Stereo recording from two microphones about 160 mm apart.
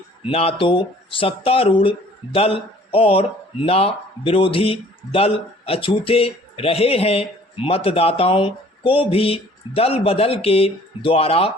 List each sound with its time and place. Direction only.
0.3 s speech: 40° left (ahead or behind)